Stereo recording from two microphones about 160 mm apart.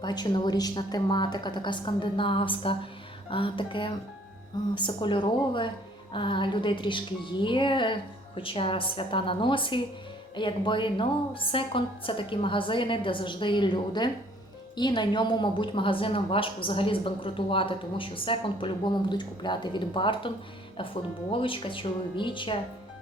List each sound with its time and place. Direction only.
0.0 s a woman's voice: 25° left (ahead or behind)